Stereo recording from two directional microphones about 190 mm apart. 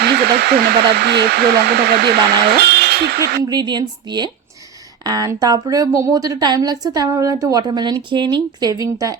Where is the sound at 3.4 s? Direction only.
20° right (ahead or behind).